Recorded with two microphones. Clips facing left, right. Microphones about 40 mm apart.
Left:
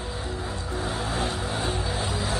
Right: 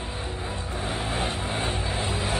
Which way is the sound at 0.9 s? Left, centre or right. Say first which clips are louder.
Even; right.